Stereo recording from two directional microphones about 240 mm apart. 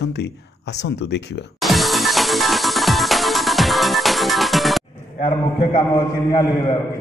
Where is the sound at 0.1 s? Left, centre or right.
Left.